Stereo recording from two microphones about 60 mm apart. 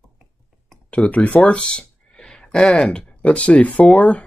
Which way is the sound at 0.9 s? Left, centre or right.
Left.